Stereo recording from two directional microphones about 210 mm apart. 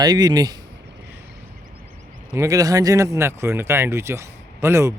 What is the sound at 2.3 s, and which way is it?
Speech, 15° right (ahead or behind).